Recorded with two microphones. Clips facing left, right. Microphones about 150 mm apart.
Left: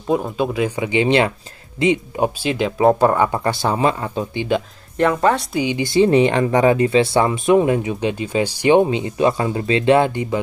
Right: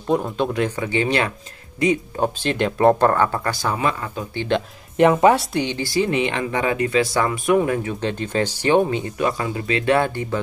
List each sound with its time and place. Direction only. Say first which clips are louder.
0.1 s speech: left 1 dB; 5° left (ahead or behind)
0.7 s speech: left 4 dB; 15° left (ahead or behind)
2.1 s speech: left 2 dB; 10° left (ahead or behind); by 4.3 s 30° left (ahead or behind)
4.4 s speech: left 1 dB; 5° left (ahead or behind)
4.9 s speech: right 2 dB; 15° right (ahead or behind)
5.5 s speech: left 2 dB; 5° left (ahead or behind)
5.8 s speech: left 8 dB; 20° left (ahead or behind)
6.0 s speech: left 7 dB; 40° left (ahead or behind); by 10.4 s 15° left (ahead or behind)